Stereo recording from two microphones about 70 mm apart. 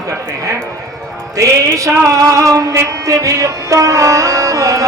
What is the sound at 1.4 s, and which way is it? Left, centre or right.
Music, right.